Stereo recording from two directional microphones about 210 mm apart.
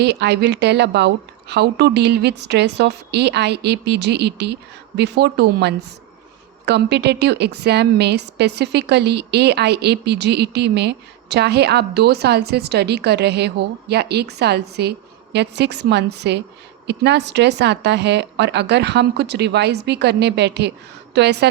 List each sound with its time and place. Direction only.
0.0 s a woman's voice: 55° right (ahead or behind)